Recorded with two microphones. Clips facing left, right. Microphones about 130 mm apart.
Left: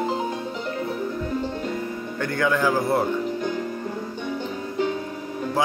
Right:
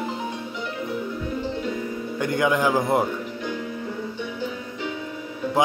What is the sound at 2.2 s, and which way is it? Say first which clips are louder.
Speech: right 1 dB; 15° right (ahead or behind).